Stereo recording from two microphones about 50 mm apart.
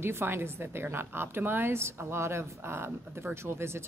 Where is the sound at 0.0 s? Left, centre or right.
Right.